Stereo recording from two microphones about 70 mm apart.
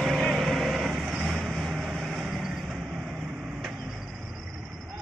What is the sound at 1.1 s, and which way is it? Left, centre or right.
Vehicle, right.